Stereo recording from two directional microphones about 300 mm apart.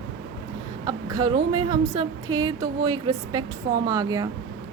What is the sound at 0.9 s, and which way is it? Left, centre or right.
A woman's voice, centre.